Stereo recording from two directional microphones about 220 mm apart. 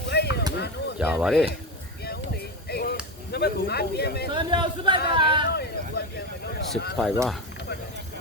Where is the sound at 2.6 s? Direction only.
45° left (ahead or behind).